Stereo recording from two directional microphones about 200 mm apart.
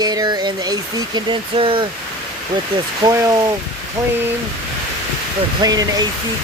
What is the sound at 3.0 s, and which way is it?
Speech, 15° right (ahead or behind).